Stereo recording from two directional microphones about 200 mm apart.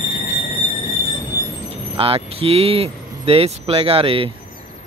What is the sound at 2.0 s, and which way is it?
Speech, 30° right (ahead or behind).